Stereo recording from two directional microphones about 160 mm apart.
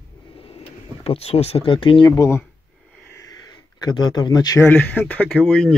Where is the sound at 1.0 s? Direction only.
40° left (ahead or behind).